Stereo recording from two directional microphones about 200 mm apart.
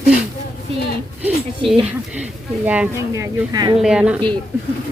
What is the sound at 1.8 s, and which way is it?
Speech, 5° right (ahead or behind).